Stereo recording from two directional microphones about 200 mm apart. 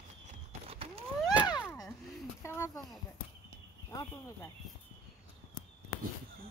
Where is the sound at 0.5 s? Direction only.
30° right (ahead or behind).